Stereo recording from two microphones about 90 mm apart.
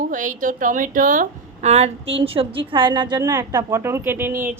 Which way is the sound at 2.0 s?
90° right.